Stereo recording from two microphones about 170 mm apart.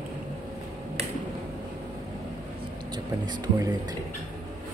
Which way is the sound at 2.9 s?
25° right (ahead or behind).